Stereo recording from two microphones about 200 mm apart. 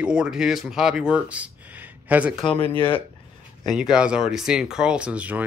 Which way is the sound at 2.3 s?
30° left (ahead or behind).